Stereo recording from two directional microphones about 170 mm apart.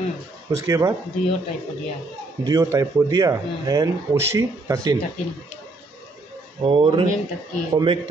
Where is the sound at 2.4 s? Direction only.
20° right (ahead or behind).